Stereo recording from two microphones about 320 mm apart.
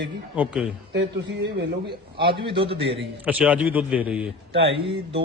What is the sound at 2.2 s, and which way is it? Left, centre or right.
Speech, centre.